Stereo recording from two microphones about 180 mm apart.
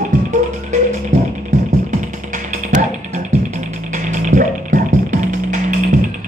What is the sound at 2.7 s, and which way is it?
Music, 45° right (ahead or behind).